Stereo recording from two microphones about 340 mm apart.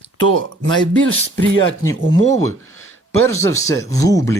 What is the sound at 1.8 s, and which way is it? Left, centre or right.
Speech, centre.